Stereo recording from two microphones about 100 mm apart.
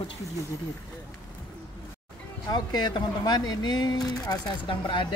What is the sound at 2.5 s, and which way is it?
Speech, 45° left (ahead or behind).